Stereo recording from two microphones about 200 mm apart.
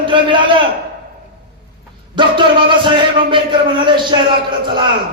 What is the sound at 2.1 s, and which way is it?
A man's voice, 25° right (ahead or behind).